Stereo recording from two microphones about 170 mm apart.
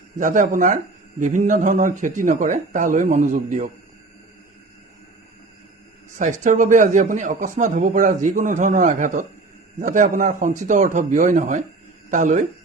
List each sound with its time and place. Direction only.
0.2 s a man's voice: 50° right (ahead or behind)
6.1 s a man's voice: 45° right (ahead or behind)